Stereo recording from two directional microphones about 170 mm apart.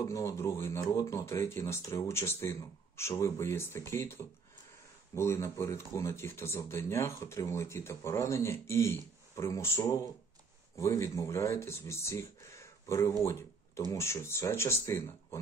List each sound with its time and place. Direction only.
0.0 s speech: 20° left (ahead or behind)